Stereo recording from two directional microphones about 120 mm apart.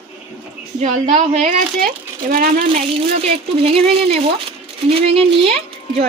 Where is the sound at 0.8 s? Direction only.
75° right (ahead or behind).